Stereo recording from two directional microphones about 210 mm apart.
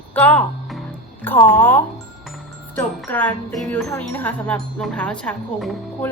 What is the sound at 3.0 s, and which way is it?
Wind chime, 10° left (ahead or behind).